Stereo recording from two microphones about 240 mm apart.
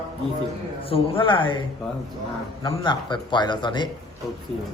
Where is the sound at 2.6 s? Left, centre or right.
Centre.